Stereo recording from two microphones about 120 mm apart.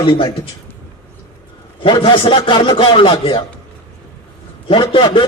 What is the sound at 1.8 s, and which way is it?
A man's voice, 45° left (ahead or behind).